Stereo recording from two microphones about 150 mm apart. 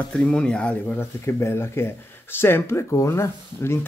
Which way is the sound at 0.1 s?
5° left (ahead or behind).